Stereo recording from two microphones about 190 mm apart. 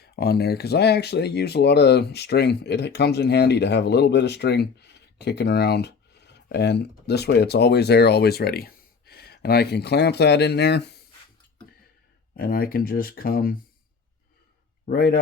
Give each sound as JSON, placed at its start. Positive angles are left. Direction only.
{"t": 0.0, "sound": "speech", "side_deg": 55}
{"t": 12.4, "sound": "speech", "side_deg": 50}
{"t": 14.8, "sound": "speech", "side_deg": 50}